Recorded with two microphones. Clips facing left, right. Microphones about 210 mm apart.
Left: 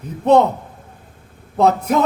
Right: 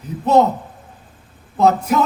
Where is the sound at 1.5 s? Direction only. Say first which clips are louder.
Even; 55° left (ahead or behind).